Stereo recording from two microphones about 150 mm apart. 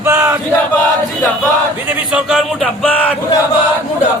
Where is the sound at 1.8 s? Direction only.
10° right (ahead or behind).